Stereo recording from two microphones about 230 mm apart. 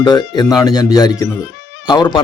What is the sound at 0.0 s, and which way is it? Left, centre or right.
A man's voice, centre.